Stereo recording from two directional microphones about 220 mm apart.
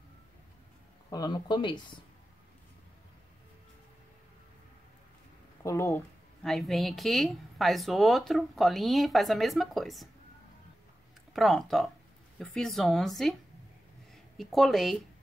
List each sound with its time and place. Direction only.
1.1 s speech: 20° left (ahead or behind)
5.6 s speech: 15° left (ahead or behind)
6.4 s a woman's voice: centre (ahead or behind)
11.3 s a woman's voice: centre (ahead or behind)